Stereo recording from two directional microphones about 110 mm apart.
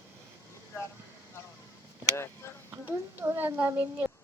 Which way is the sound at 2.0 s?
25° left (ahead or behind).